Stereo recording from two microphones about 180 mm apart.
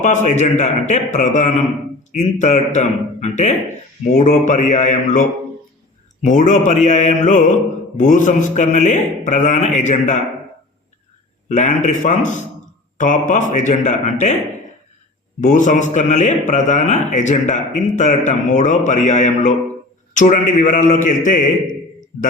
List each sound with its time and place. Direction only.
0.0 s a man's voice: 40° left (ahead or behind)
6.2 s speech: 45° left (ahead or behind)
11.4 s speech: 40° left (ahead or behind)
15.4 s speech: 45° left (ahead or behind)